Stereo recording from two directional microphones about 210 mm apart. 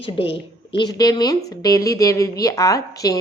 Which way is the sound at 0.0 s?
25° left (ahead or behind).